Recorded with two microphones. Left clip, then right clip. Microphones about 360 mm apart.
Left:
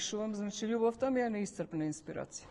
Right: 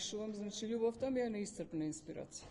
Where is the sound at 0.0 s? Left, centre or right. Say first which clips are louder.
Left 5 dB; left.